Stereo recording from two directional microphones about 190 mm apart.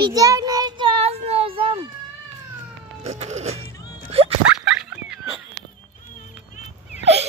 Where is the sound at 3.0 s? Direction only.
35° right (ahead or behind).